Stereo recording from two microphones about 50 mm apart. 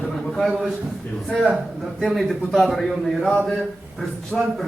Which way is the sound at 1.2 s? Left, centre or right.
Centre.